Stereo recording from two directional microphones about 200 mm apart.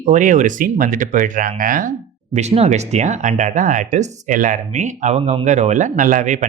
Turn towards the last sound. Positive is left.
turn(degrees=-40)  # may be behind; listen again after turning